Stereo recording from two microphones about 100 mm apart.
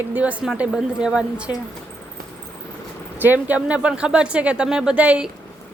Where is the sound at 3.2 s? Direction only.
15° right (ahead or behind).